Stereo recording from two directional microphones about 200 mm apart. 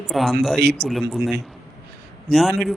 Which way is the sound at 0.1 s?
Centre (ahead or behind).